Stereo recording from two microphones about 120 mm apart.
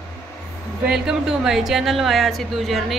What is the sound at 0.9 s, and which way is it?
A woman's voice, 5° right (ahead or behind).